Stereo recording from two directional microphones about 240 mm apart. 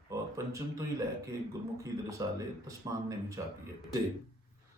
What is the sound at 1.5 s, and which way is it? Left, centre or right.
Speech, centre.